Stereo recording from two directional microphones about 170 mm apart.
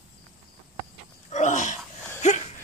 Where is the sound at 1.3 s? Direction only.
45° left (ahead or behind).